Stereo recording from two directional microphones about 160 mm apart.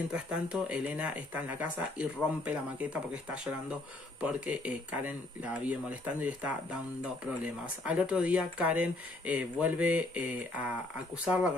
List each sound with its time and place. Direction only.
0.1 s speech: 5° right (ahead or behind)